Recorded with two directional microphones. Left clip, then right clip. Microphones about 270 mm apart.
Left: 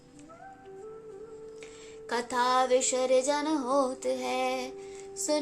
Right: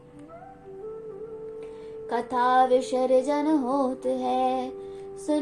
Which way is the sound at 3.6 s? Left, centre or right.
Centre.